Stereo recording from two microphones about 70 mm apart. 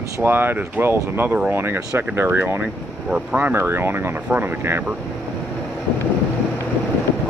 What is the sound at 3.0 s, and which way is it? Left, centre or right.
Speech, centre.